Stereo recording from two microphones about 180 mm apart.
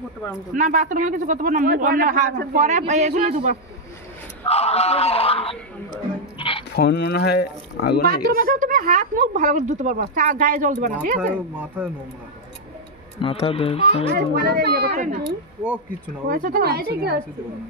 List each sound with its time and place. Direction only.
0.6 s a man's voice: 45° right (ahead or behind)
4.5 s speech: 35° left (ahead or behind)
6.3 s dog: 30° left (ahead or behind)
6.7 s speech: 70° left (ahead or behind)
8.1 s speech: 50° right (ahead or behind)
11.1 s speech: 10° right (ahead or behind)
13.2 s speech: 30° left (ahead or behind)
14.1 s a woman's voice: 60° right (ahead or behind)
15.0 s speech: 45° right (ahead or behind)
16.3 s a woman's voice: 50° right (ahead or behind)